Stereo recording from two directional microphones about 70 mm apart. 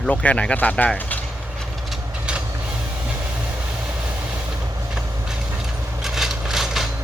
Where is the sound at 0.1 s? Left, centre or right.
Centre.